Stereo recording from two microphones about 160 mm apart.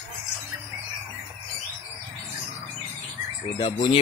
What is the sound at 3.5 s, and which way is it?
Speech, 30° left (ahead or behind).